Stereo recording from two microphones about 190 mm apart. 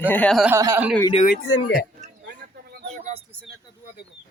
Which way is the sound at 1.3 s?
60° left (ahead or behind).